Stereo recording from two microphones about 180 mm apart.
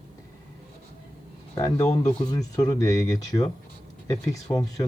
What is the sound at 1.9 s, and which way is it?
Speech, 40° left (ahead or behind).